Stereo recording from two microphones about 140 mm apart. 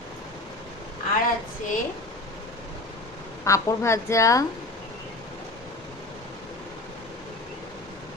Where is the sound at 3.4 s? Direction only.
20° left (ahead or behind).